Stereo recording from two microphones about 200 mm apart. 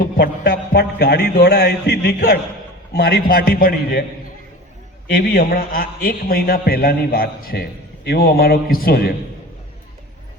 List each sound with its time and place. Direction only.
0.0 s a man's voice: 50° left (ahead or behind)
5.1 s a man's voice: 45° left (ahead or behind)